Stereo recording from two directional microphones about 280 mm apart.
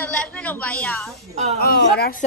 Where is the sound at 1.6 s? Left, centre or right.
Left.